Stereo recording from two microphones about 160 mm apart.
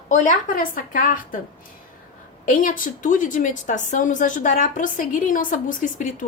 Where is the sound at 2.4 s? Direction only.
55° left (ahead or behind).